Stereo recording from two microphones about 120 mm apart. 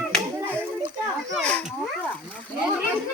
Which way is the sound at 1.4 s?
10° left (ahead or behind).